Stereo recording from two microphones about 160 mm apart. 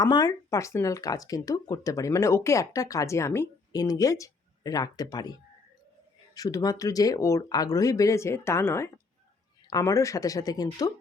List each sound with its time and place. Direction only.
0.0 s speech: 25° left (ahead or behind)